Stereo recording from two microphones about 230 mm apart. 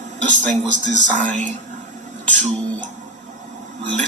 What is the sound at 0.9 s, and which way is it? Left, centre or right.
Speech, right.